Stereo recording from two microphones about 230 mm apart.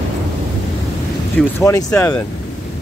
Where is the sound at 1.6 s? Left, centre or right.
Centre.